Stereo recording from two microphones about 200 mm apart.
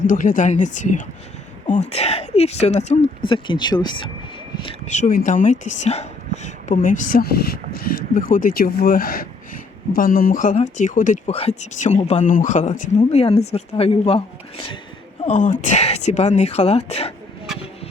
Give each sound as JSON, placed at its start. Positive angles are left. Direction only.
{"t": 0.1, "sound": "speech", "side_deg": 40}
{"t": 4.9, "sound": "speech", "side_deg": 40}
{"t": 15.2, "sound": "speech", "side_deg": 35}